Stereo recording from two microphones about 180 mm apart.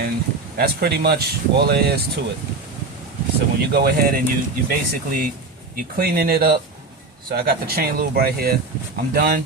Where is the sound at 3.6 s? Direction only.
65° right (ahead or behind).